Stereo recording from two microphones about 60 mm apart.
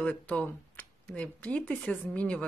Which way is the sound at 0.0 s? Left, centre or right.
Left.